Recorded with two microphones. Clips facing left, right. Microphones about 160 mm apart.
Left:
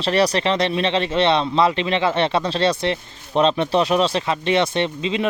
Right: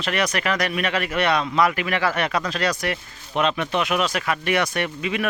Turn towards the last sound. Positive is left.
turn(degrees=25)  # may be behind; listen again after turning